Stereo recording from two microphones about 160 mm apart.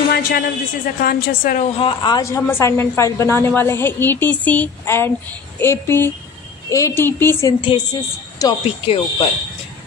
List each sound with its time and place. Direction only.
0.1 s a sound: 75° left (ahead or behind)
1.0 s a woman's voice: 65° left (ahead or behind)
1.6 s a woman's voice: 35° left (ahead or behind); by 7.5 s 15° left (ahead or behind)
7.6 s speech: 25° left (ahead or behind)